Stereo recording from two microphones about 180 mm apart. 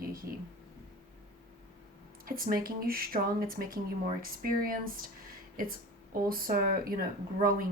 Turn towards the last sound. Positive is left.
turn(degrees=-55)  # may be behind; listen again after turning